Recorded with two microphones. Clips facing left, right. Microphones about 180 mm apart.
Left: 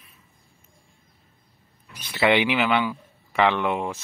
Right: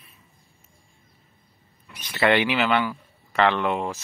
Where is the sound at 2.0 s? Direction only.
10° left (ahead or behind).